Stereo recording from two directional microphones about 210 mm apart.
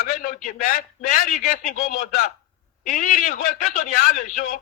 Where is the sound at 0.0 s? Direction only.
40° left (ahead or behind).